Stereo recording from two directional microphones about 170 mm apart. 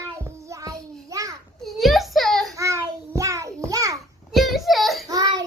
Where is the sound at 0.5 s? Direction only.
20° right (ahead or behind).